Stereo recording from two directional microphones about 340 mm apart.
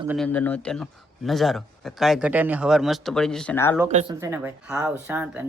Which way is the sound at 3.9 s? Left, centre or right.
Centre.